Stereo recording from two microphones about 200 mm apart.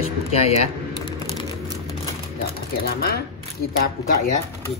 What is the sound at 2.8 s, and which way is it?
Speech, 50° left (ahead or behind).